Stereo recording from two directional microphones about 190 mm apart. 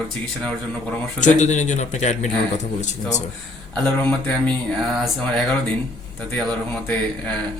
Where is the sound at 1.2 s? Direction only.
40° left (ahead or behind).